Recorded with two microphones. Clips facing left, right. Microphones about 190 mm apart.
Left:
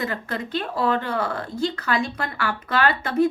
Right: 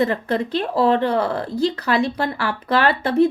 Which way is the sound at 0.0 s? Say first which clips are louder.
Right 8 dB; 35° right (ahead or behind).